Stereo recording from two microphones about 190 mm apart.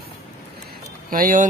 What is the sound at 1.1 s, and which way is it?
Speech, 45° right (ahead or behind).